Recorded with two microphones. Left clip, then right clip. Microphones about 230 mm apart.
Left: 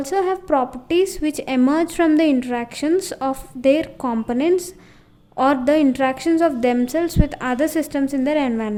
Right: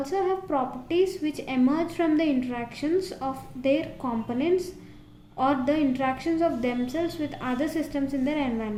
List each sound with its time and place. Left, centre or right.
0.0 s a woman's voice: left